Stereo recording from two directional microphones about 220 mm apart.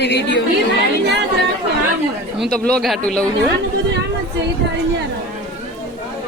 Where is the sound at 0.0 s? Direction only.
50° left (ahead or behind).